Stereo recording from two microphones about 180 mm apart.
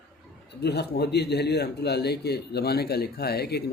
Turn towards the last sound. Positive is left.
turn(degrees=65)  # may be behind; listen again after turning